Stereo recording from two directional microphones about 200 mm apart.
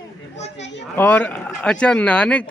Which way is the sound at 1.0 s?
10° left (ahead or behind).